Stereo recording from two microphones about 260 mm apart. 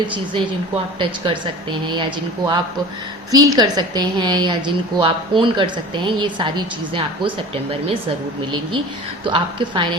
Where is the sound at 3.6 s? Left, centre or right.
Centre.